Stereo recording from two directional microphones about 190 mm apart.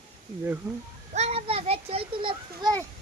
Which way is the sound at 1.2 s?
30° right (ahead or behind).